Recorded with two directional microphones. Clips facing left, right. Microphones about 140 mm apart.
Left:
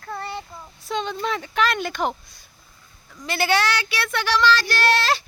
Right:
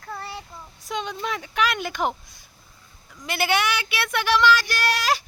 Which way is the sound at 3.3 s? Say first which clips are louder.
Left 2 dB; 15° right (ahead or behind).